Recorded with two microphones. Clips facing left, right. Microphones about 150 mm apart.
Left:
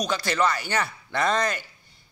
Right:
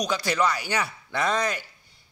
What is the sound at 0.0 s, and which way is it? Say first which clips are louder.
A man's voice: even; 10° right (ahead or behind).